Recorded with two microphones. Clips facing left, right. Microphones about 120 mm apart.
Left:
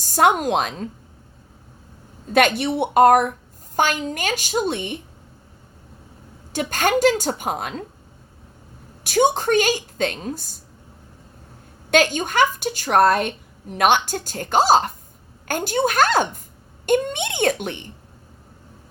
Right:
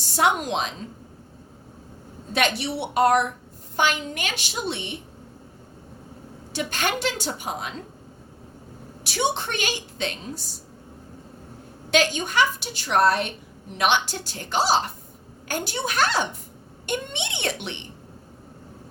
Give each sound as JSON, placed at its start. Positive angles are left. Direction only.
{"t": 0.0, "sound": "a woman's voice", "side_deg": 45}
{"t": 2.3, "sound": "a woman's voice", "side_deg": 50}
{"t": 6.5, "sound": "a woman's voice", "side_deg": 45}
{"t": 9.0, "sound": "a woman's voice", "side_deg": 45}
{"t": 11.9, "sound": "a woman's voice", "side_deg": 50}